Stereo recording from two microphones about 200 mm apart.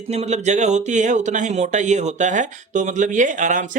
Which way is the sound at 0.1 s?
35° right (ahead or behind).